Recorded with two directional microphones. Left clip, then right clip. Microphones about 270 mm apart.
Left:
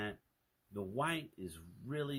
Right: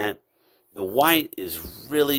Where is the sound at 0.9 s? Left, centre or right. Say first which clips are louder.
Right 19 dB; right.